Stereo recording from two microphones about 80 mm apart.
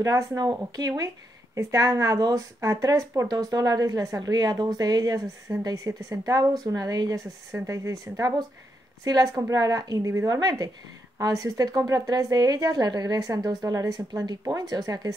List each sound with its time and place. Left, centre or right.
0.0 s speech: right
0.4 s speech: right
7.5 s speech: right